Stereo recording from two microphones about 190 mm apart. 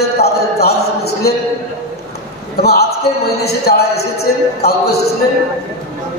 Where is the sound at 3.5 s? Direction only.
55° left (ahead or behind).